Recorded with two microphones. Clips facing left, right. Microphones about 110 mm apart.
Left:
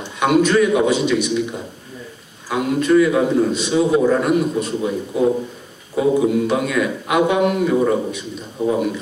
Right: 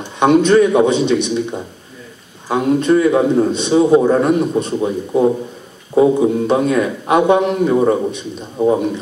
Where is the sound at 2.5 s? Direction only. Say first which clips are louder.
Right 3 dB; 30° right (ahead or behind).